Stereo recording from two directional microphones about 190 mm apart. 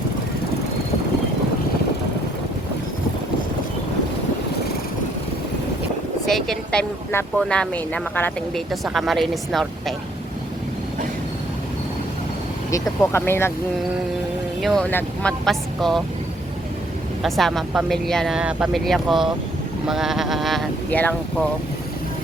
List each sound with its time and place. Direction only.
6.2 s speech: centre (ahead or behind)
12.7 s speech: 15° left (ahead or behind)
14.6 s speech: centre (ahead or behind)
17.2 s speech: centre (ahead or behind)